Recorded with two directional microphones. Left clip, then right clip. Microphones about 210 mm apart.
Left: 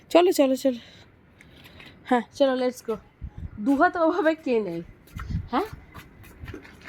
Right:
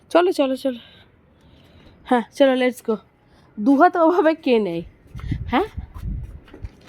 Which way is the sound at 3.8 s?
50° right (ahead or behind).